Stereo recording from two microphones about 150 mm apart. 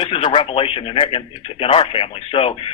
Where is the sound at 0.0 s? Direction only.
30° left (ahead or behind).